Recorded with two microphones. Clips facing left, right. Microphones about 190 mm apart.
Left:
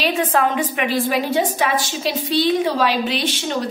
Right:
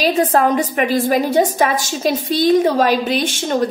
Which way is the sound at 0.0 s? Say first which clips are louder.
Right 4 dB; 40° right (ahead or behind).